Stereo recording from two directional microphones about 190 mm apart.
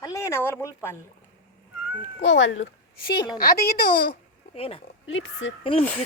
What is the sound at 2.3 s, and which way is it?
Speech, 75° left (ahead or behind).